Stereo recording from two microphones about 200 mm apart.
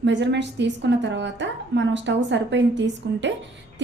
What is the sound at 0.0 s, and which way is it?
A woman's voice, 60° right (ahead or behind).